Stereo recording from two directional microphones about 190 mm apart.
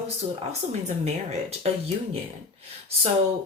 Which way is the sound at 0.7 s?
35° right (ahead or behind).